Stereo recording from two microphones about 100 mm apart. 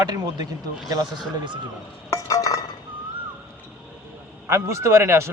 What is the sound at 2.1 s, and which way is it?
Stir, 35° left (ahead or behind).